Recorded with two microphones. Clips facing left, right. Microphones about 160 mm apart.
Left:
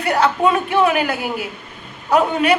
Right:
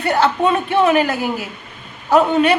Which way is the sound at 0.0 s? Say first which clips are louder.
Even; 30° right (ahead or behind).